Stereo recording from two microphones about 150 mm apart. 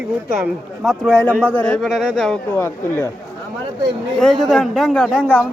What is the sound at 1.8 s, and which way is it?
Speech, 5° right (ahead or behind).